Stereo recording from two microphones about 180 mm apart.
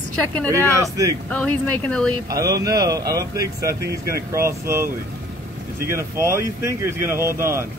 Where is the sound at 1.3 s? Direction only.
5° left (ahead or behind).